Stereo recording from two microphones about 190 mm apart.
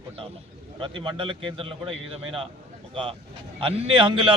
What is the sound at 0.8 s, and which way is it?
A man's voice, 25° right (ahead or behind).